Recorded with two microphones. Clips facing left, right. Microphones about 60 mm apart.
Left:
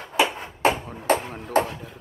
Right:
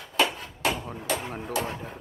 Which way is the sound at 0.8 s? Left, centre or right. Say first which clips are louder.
Even; centre.